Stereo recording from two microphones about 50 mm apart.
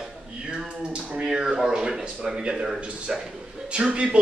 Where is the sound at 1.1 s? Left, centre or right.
Centre.